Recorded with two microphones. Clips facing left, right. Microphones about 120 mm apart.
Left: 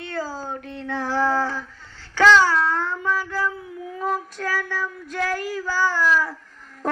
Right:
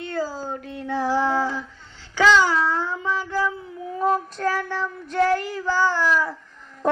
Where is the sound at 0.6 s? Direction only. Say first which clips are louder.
Right 6 dB; 10° right (ahead or behind).